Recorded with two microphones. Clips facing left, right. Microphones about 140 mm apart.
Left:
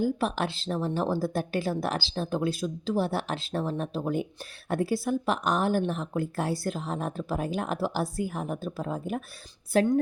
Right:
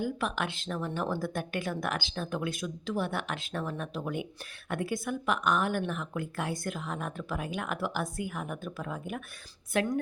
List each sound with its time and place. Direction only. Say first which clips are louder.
0.0 s a woman's voice: left 5 dB; 35° left (ahead or behind)